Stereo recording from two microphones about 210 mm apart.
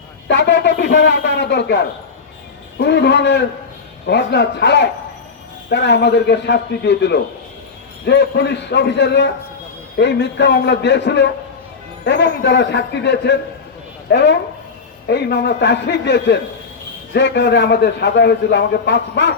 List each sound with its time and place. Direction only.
0.3 s a man's voice: 55° left (ahead or behind)